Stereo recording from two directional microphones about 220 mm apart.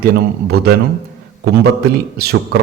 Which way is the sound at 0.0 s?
45° right (ahead or behind).